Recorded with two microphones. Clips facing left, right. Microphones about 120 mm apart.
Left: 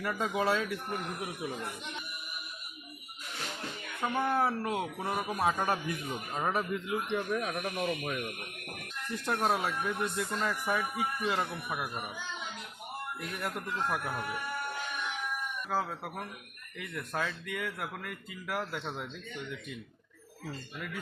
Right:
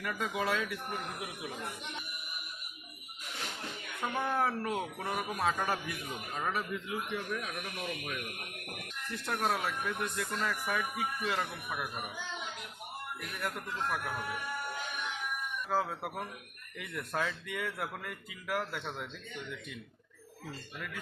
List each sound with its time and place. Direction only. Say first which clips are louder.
0.0 s speech: left 3 dB; 30° left (ahead or behind)
4.0 s speech: left 3 dB; 5° left (ahead or behind)
5.8 s a man's voice: left 4 dB; 25° left (ahead or behind)
7.4 s a man's voice: left 6 dB; 40° left (ahead or behind)
9.2 s speech: left 3 dB; 20° left (ahead or behind)
15.7 s speech: right 1 dB; centre (ahead or behind)